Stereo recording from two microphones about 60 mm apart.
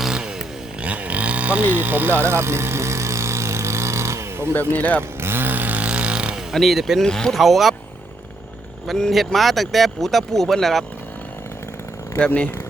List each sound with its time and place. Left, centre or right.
0.0 s chainsaw: centre
0.9 s livestock: right
1.7 s a sound: right
4.8 s speech: left
5.2 s chainsaw: right; by 6.4 s centre
6.5 s speech: centre
7.0 s speech: centre
7.3 s speech: centre
8.9 s speech: centre
12.2 s speech: centre